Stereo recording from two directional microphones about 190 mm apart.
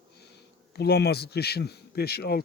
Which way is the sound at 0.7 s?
60° left (ahead or behind).